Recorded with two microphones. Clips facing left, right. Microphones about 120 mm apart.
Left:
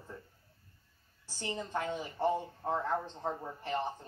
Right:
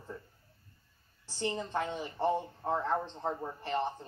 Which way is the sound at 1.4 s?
15° right (ahead or behind).